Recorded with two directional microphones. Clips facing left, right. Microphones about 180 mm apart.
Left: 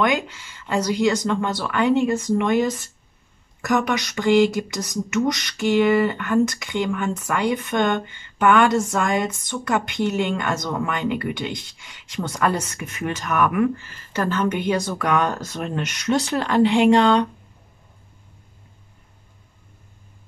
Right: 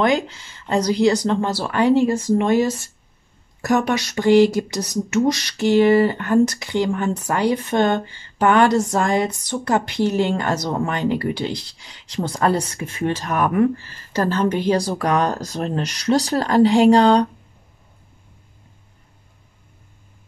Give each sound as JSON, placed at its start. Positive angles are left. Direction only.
{"t": 0.0, "sound": "speech", "side_deg": -35}
{"t": 4.4, "sound": "speech", "side_deg": -35}